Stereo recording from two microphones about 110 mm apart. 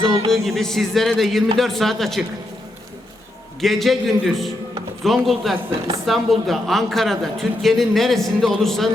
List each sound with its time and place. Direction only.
0.3 s a woman's voice: centre (ahead or behind)
3.6 s a woman's voice: centre (ahead or behind)